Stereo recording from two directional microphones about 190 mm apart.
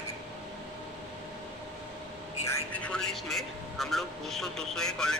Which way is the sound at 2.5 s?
5° left (ahead or behind).